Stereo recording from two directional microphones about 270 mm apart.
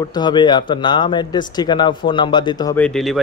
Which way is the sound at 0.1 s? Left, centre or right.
Centre.